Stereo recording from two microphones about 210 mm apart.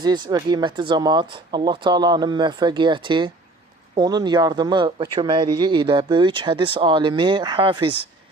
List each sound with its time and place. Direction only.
0.0 s speech: 20° right (ahead or behind)